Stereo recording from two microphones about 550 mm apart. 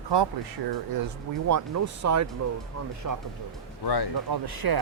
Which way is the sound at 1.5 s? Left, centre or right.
Right.